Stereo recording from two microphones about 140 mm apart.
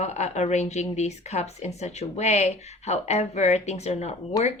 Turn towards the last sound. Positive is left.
turn(degrees=25)  # may be behind; listen again after turning